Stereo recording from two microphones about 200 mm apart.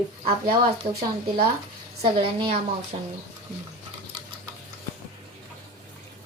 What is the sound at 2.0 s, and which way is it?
Speech, 25° right (ahead or behind).